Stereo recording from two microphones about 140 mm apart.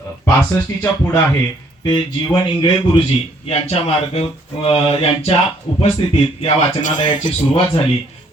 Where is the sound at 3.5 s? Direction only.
50° left (ahead or behind).